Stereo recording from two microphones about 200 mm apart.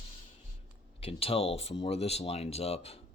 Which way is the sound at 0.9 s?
30° left (ahead or behind).